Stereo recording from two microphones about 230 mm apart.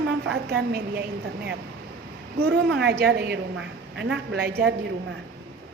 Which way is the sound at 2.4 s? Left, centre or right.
Right.